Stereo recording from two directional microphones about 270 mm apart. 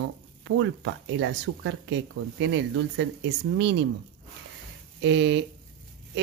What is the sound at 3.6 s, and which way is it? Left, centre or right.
Speech, right.